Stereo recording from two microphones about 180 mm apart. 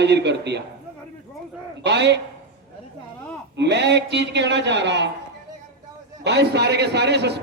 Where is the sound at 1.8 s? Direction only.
70° right (ahead or behind).